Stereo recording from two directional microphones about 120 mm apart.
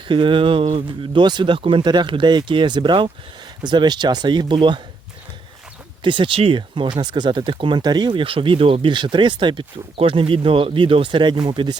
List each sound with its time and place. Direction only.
0.1 s speech: 45° right (ahead or behind)
6.0 s speech: 45° right (ahead or behind)